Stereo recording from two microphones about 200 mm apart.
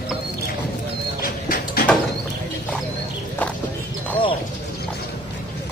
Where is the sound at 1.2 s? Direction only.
45° left (ahead or behind).